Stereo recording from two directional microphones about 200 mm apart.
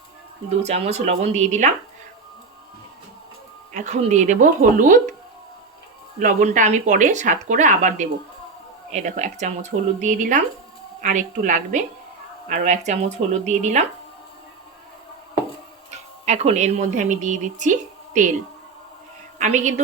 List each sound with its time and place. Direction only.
0.6 s speech: 35° right (ahead or behind)
3.7 s speech: 35° right (ahead or behind)
6.1 s speech: 40° right (ahead or behind)
15.9 s speech: 35° right (ahead or behind)
19.4 s speech: 35° right (ahead or behind)